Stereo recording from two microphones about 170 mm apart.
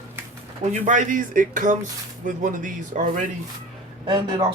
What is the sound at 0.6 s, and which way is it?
Speech, 45° right (ahead or behind).